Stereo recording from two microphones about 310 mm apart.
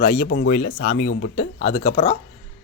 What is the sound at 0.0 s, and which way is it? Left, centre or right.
Speech, left.